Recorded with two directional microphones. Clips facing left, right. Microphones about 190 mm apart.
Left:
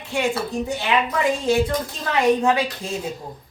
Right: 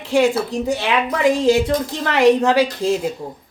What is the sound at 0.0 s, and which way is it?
A woman's voice, 90° right.